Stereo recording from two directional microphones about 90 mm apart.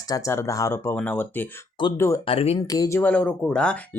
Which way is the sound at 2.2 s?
90° left.